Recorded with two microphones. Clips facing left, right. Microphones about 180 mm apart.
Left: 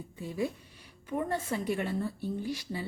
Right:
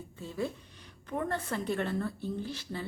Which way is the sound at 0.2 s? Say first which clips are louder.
Left 2 dB; 15° left (ahead or behind).